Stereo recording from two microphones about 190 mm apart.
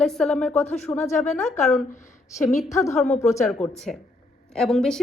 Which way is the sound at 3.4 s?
5° left (ahead or behind).